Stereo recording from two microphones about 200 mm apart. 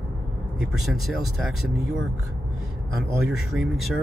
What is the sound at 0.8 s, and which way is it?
Speech, centre (ahead or behind).